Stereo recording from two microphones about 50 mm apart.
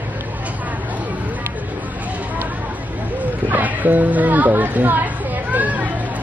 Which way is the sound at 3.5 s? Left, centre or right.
Right.